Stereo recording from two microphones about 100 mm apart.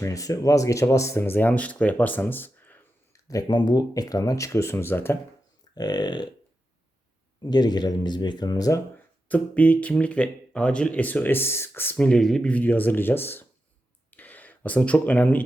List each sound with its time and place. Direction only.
0.0 s speech: 35° left (ahead or behind)
3.1 s speech: 35° left (ahead or behind)
5.7 s speech: 45° left (ahead or behind)
7.5 s speech: 45° left (ahead or behind)
9.3 s speech: 15° left (ahead or behind)
12.0 s speech: 5° left (ahead or behind)
14.1 s a sound: 15° left (ahead or behind)